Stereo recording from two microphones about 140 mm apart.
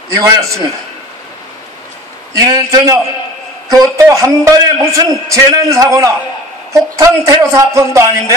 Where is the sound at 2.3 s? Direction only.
25° right (ahead or behind).